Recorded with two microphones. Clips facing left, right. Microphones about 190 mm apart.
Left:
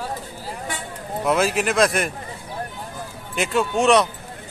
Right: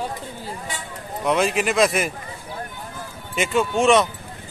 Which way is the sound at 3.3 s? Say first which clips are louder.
Right 1 dB; centre (ahead or behind).